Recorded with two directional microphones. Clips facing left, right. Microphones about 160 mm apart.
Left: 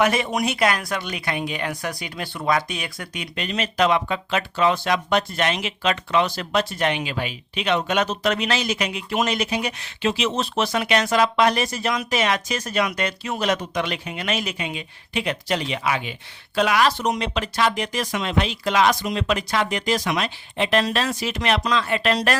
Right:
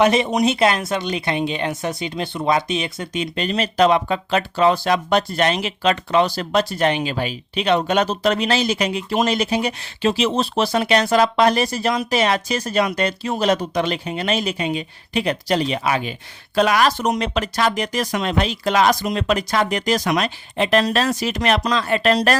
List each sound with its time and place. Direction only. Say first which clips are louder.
0.0 s speech: right 5 dB; 25° right (ahead or behind)